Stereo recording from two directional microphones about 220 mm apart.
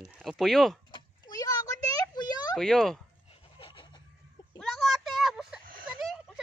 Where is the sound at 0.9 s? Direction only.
15° left (ahead or behind).